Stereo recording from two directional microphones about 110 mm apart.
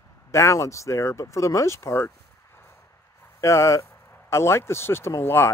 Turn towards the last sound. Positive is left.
turn(degrees=20)  # may be behind; listen again after turning